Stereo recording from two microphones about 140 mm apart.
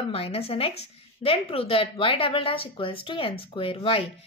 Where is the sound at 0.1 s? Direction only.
40° left (ahead or behind).